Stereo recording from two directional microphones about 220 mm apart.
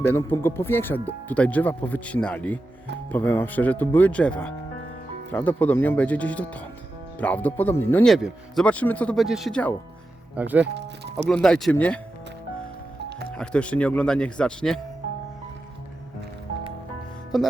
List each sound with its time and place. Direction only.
0.0 s speech: 10° left (ahead or behind)
10.3 s speech: 5° right (ahead or behind)
10.8 s speech: 50° right (ahead or behind)
11.3 s speech: 5° left (ahead or behind)
13.3 s speech: 5° left (ahead or behind)
17.3 s speech: centre (ahead or behind)